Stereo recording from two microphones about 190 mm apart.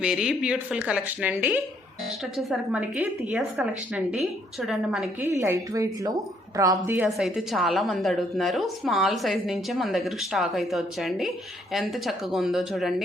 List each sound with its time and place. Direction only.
0.0 s a woman's voice: 5° right (ahead or behind)
5.2 s a woman's voice: 15° right (ahead or behind)
7.2 s a woman's voice: centre (ahead or behind)